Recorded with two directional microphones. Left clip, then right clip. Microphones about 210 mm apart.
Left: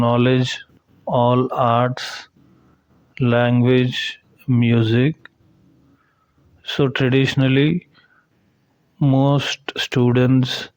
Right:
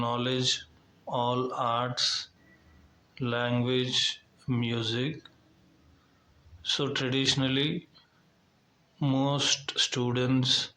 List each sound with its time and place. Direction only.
0.0 s speech: 45° left (ahead or behind)
6.6 s speech: 45° left (ahead or behind)